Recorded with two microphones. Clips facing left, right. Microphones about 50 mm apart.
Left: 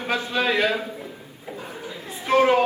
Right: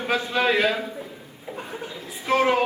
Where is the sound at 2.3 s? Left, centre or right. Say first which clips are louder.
Left 2 dB; centre.